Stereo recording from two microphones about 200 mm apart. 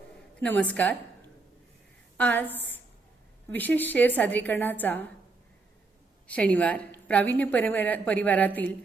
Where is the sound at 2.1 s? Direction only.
10° left (ahead or behind).